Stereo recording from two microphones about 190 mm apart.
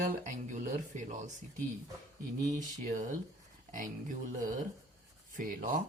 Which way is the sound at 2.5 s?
40° right (ahead or behind).